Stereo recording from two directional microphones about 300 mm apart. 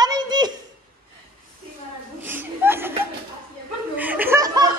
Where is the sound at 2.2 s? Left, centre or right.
Centre.